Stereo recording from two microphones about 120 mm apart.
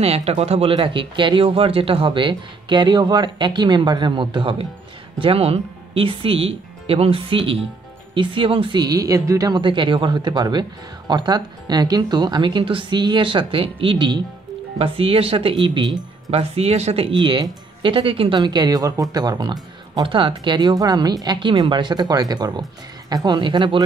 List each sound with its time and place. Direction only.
0.0 s speech: 60° right (ahead or behind)
0.7 s speech: 40° right (ahead or behind)
5.2 s speech: 55° right (ahead or behind)
8.8 s speech: 30° right (ahead or behind)
16.3 s speech: 60° right (ahead or behind)
18.4 s speech: 35° right (ahead or behind)
20.1 s speech: 45° right (ahead or behind)